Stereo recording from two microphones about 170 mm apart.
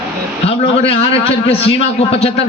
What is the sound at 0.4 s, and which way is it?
A man's voice, 35° left (ahead or behind).